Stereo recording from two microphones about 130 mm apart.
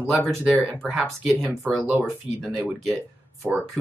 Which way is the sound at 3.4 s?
15° right (ahead or behind).